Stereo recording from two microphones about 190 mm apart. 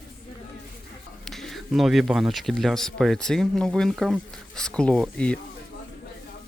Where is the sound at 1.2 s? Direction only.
Centre (ahead or behind).